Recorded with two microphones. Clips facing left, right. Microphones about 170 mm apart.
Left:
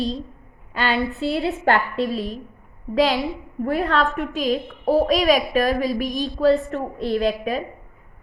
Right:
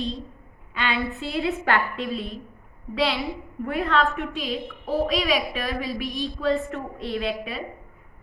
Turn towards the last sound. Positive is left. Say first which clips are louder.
# left 6 dB
turn(degrees=40)  # may be behind; listen again after turning